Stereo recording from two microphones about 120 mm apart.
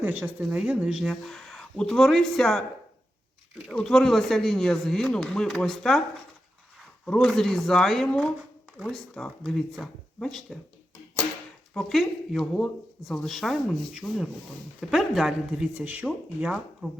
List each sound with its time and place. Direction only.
0.0 s speech: 15° right (ahead or behind); by 2.6 s 5° left (ahead or behind)
3.7 s speech: 5° left (ahead or behind)
7.0 s speech: 5° left (ahead or behind)
11.7 s speech: 5° left (ahead or behind)